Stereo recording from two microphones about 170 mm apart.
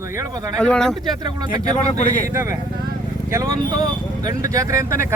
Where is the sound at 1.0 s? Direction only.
25° right (ahead or behind).